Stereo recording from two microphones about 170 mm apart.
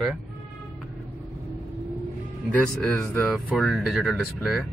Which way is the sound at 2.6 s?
5° left (ahead or behind).